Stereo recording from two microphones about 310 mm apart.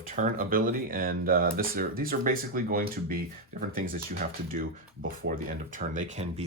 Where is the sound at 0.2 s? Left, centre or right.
Right.